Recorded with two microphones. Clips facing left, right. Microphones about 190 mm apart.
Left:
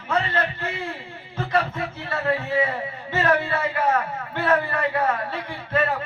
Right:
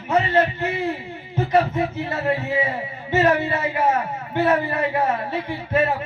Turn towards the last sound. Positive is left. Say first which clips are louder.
# right 4 dB
turn(degrees=-20)  # may be behind; listen again after turning